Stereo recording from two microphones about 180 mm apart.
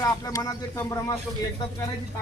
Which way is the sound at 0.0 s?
20° left (ahead or behind).